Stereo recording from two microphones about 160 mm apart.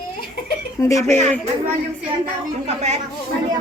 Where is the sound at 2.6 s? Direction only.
45° right (ahead or behind).